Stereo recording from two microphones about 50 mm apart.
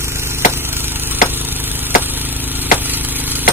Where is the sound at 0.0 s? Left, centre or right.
Right.